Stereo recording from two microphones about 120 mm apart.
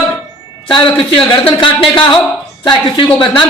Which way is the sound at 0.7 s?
40° left (ahead or behind).